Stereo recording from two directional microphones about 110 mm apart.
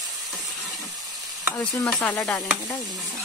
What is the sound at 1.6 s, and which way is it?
Stir, 20° left (ahead or behind).